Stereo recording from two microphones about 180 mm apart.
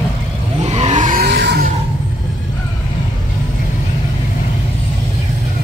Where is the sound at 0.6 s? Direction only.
40° right (ahead or behind).